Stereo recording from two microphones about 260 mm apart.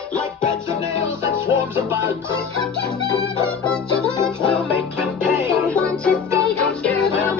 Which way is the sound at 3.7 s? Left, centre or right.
Centre.